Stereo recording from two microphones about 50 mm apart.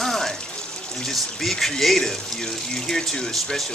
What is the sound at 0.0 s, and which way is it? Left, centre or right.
Water, centre.